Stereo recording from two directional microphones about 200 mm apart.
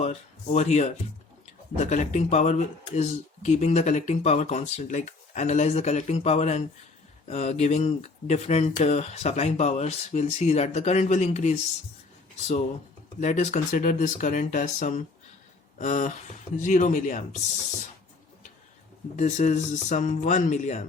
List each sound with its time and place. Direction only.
0.0 s speech: 35° left (ahead or behind)
13.1 s speech: 40° left (ahead or behind)
19.1 s speech: 35° left (ahead or behind)